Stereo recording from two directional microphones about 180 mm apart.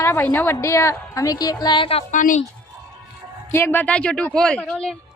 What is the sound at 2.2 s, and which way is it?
Speech, 45° left (ahead or behind).